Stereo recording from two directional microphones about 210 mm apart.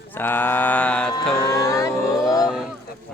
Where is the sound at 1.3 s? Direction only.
15° left (ahead or behind).